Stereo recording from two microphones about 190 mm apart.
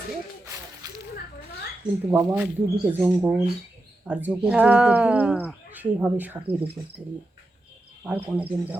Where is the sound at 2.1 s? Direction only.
10° right (ahead or behind).